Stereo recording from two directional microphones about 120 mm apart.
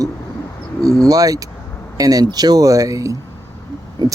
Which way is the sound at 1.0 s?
30° right (ahead or behind).